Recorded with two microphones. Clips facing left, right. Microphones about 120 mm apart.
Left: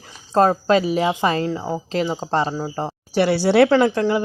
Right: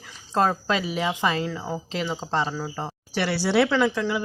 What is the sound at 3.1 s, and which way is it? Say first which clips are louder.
Speech: left 6 dB; 45° left (ahead or behind).